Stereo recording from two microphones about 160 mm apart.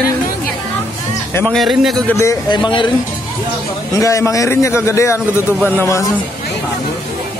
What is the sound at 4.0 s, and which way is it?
A man's voice, 20° left (ahead or behind).